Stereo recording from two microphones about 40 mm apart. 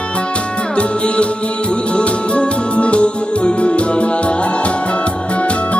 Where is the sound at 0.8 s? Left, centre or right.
Left.